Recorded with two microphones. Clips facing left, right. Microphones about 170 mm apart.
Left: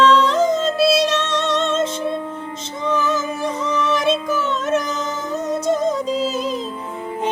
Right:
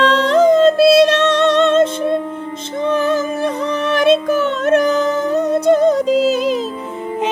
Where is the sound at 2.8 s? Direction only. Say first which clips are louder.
Right 5 dB; 60° right (ahead or behind).